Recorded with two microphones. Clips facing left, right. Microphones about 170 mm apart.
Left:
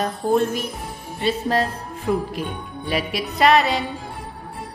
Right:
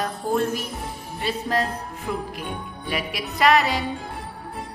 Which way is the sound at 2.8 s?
30° left (ahead or behind).